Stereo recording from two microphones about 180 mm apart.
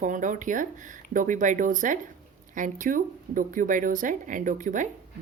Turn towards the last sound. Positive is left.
turn(degrees=-45)  # may be behind; listen again after turning